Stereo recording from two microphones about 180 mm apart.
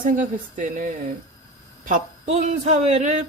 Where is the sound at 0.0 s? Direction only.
45° right (ahead or behind).